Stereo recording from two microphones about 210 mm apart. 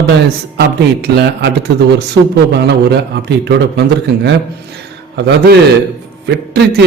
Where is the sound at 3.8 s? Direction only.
55° right (ahead or behind).